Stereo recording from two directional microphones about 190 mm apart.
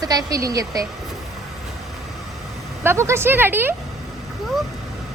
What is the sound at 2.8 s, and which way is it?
Speech, 15° right (ahead or behind).